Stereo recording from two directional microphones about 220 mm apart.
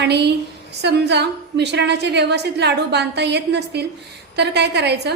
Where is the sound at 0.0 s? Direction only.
50° right (ahead or behind).